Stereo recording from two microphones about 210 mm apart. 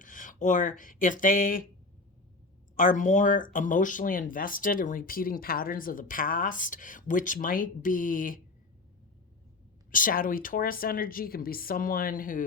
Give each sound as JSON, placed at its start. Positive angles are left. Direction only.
{"t": 0.0, "sound": "speech", "side_deg": 40}
{"t": 2.7, "sound": "speech", "side_deg": 40}
{"t": 9.9, "sound": "speech", "side_deg": 40}